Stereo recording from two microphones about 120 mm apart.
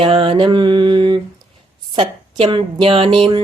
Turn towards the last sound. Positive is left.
turn(degrees=-45)  # may be behind; listen again after turning